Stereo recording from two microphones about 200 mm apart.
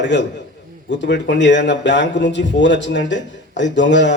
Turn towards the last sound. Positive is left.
turn(degrees=65)  # may be behind; listen again after turning